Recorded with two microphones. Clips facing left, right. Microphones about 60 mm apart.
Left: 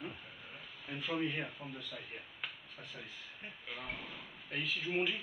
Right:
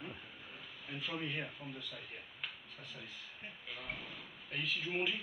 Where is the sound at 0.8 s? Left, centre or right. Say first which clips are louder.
Left 5 dB; centre.